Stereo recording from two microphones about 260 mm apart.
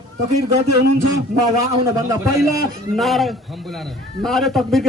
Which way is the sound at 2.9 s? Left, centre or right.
Centre.